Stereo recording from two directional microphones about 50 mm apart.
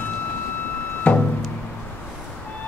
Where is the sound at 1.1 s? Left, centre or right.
Left.